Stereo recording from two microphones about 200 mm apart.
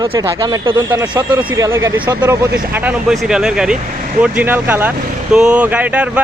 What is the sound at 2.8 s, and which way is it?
Speech, 5° right (ahead or behind).